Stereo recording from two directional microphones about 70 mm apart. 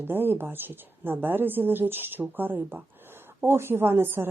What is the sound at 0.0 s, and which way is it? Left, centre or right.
Speech, right.